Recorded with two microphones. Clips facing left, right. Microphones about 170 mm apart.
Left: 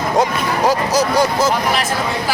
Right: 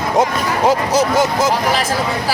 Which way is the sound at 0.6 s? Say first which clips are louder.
Right 2 dB; 25° right (ahead or behind).